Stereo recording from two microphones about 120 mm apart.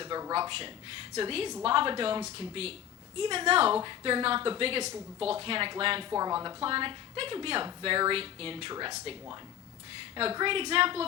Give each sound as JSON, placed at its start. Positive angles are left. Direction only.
{"t": 0.0, "sound": "a sound", "side_deg": -35}
{"t": 1.2, "sound": "a woman's voice", "side_deg": -50}
{"t": 6.1, "sound": "speech", "side_deg": -30}
{"t": 6.6, "sound": "a woman's voice", "side_deg": -45}
{"t": 8.7, "sound": "speech", "side_deg": -30}
{"t": 10.3, "sound": "a woman's voice", "side_deg": -45}